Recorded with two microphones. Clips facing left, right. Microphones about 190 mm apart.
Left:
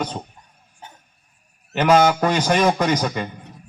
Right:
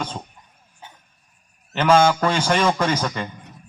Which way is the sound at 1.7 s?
15° left (ahead or behind).